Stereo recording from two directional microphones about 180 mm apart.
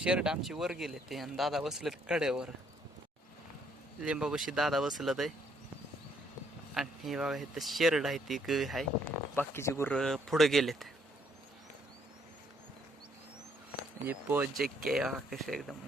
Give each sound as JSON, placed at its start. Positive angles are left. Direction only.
{"t": 0.0, "sound": "speech", "side_deg": -5}
{"t": 4.0, "sound": "speech", "side_deg": -5}
{"t": 6.7, "sound": "speech", "side_deg": 0}
{"t": 9.3, "sound": "speech", "side_deg": 10}
{"t": 14.1, "sound": "speech", "side_deg": -10}